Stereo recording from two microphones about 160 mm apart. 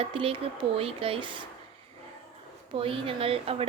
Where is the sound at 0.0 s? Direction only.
35° right (ahead or behind).